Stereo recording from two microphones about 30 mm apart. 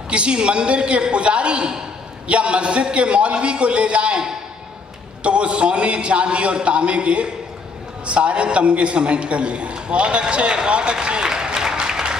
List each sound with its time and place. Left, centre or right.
0.1 s a man's voice: right
5.2 s a man's voice: right